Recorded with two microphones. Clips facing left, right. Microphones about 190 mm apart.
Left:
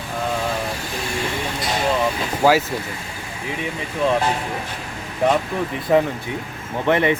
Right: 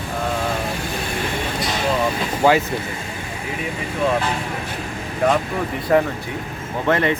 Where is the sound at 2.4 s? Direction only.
5° left (ahead or behind).